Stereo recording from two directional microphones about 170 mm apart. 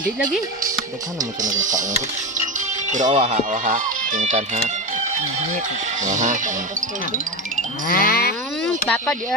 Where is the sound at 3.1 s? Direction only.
40° right (ahead or behind).